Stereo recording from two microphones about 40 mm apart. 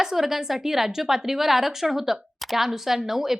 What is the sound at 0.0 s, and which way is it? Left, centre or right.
A woman's voice, centre.